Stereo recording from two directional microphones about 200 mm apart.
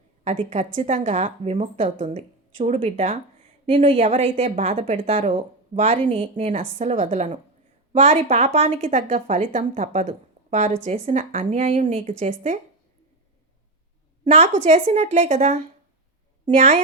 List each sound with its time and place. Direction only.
0.3 s speech: 35° right (ahead or behind)
14.3 s speech: 35° right (ahead or behind)